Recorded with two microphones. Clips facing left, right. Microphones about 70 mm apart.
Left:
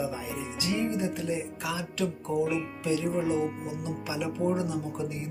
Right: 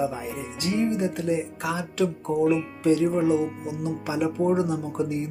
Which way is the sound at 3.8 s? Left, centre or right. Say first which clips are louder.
Right 8 dB; right.